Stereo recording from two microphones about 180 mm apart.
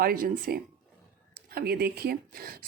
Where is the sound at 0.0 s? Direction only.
55° right (ahead or behind).